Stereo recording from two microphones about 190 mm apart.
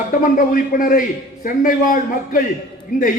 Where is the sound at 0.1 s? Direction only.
45° left (ahead or behind).